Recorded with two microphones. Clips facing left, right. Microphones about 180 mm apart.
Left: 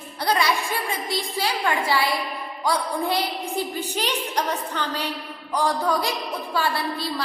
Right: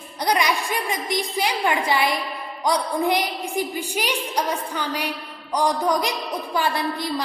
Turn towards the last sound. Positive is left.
turn(degrees=-20)  # may be behind; listen again after turning